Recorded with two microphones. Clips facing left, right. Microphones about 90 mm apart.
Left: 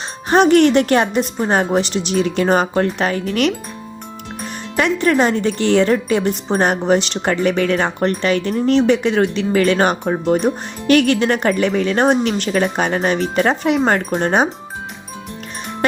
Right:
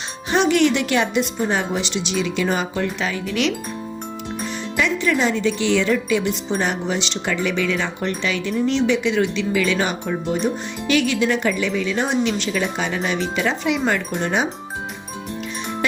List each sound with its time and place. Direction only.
0.3 s speech: 45° left (ahead or behind)
4.8 s speech: 50° left (ahead or behind)